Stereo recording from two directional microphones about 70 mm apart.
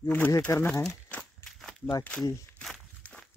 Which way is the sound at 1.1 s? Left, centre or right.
Left.